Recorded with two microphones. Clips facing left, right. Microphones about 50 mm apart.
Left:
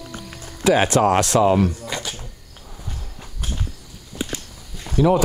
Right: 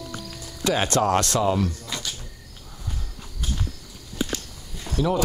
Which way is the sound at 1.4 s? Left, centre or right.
Left.